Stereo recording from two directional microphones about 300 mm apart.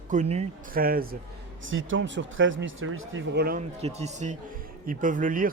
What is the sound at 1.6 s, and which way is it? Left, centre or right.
Speech, right.